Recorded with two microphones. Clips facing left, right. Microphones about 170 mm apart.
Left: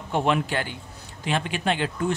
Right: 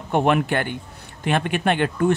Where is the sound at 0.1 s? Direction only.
55° right (ahead or behind).